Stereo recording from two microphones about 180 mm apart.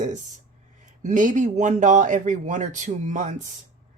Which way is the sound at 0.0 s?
45° right (ahead or behind).